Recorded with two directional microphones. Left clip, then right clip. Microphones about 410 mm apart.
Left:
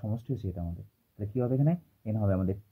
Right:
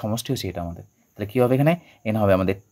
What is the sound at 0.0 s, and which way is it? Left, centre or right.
Speech, centre.